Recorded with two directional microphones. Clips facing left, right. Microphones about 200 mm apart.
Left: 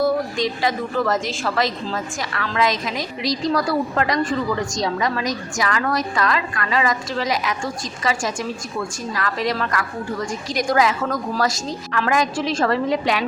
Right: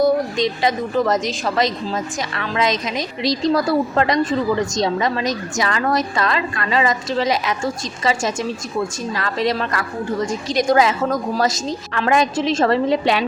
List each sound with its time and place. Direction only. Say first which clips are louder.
0.0 s a woman's voice: right 3 dB; 20° right (ahead or behind)